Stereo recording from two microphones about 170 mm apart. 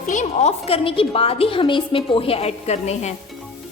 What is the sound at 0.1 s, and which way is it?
A woman's voice, 45° left (ahead or behind).